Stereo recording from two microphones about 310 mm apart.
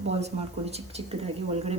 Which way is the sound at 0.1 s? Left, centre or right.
Centre.